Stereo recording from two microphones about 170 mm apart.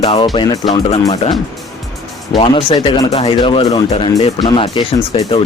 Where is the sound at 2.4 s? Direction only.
30° left (ahead or behind).